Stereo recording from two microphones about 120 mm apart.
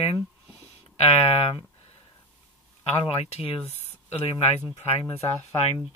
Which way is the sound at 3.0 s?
55° left (ahead or behind).